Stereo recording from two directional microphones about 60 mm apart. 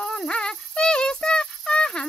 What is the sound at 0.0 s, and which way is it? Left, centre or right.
Music, centre.